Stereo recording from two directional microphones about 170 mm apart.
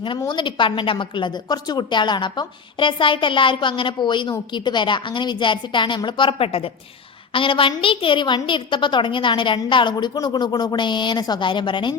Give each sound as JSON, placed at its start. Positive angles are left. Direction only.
{"t": 0.2, "sound": "a woman's voice", "side_deg": 25}